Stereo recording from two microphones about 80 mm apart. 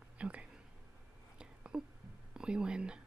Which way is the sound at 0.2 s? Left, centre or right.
Centre.